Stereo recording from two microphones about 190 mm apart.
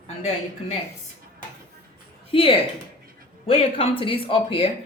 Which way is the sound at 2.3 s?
30° left (ahead or behind).